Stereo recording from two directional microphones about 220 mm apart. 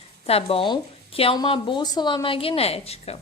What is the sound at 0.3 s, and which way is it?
Speech, 25° left (ahead or behind).